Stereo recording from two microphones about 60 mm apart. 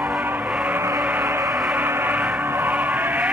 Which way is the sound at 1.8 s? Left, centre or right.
Right.